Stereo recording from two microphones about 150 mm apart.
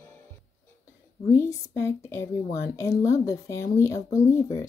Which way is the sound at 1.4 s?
20° left (ahead or behind).